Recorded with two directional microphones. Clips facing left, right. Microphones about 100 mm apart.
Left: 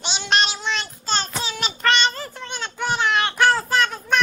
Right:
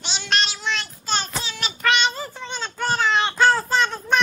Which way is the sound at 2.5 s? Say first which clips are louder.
Even; 10° left (ahead or behind).